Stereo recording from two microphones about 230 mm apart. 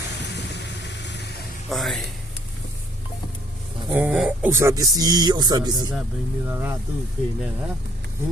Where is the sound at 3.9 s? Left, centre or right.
Centre.